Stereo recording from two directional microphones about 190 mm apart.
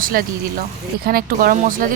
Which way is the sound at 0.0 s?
50° right (ahead or behind).